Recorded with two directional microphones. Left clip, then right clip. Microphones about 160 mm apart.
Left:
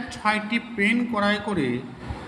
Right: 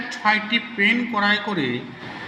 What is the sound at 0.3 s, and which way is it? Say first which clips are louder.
Speech: right 4 dB; 25° left (ahead or behind).